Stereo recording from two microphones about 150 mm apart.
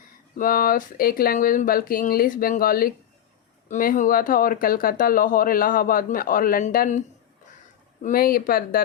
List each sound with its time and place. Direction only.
0.3 s speech: 70° left (ahead or behind)
3.7 s speech: 60° left (ahead or behind)
8.0 s speech: 75° left (ahead or behind)